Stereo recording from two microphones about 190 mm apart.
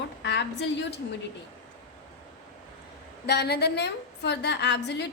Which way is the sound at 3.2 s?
60° left (ahead or behind).